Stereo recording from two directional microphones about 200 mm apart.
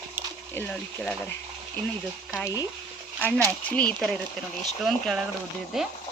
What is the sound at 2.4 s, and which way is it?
Speech, 15° left (ahead or behind).